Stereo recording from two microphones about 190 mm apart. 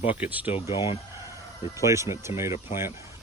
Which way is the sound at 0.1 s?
10° right (ahead or behind).